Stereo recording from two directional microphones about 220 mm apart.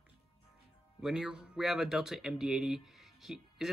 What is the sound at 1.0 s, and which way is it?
Speech, 5° right (ahead or behind).